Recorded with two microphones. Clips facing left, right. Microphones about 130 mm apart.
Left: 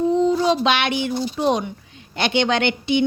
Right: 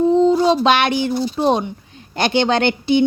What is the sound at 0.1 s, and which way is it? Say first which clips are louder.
A woman's voice: right 4 dB; 30° right (ahead or behind).